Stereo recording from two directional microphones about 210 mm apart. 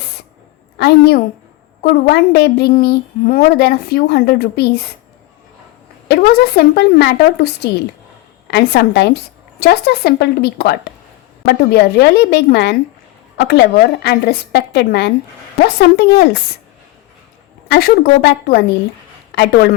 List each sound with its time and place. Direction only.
0.8 s speech: 50° left (ahead or behind)
6.1 s speech: 50° left (ahead or behind)
17.7 s speech: 50° left (ahead or behind)